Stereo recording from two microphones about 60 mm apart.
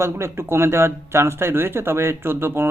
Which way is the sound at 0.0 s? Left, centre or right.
Right.